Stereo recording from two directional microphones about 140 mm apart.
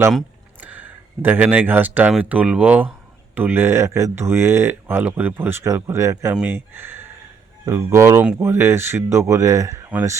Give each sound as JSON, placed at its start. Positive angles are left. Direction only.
{"t": 0.6, "sound": "speech", "side_deg": -10}